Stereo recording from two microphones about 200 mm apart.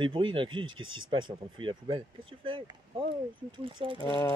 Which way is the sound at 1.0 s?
25° right (ahead or behind).